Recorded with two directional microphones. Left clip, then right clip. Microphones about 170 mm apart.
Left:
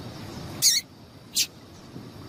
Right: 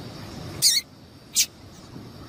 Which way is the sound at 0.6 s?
Centre (ahead or behind).